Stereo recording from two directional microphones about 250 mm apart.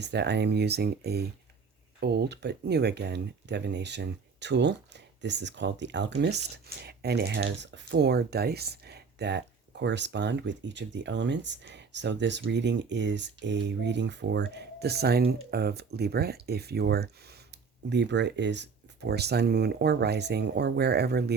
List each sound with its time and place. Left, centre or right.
0.0 s speech: right